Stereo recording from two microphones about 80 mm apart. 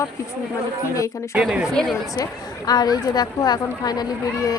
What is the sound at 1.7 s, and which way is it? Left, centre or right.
Speech, centre.